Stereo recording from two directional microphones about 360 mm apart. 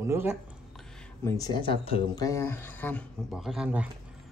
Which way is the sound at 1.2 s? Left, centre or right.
Centre.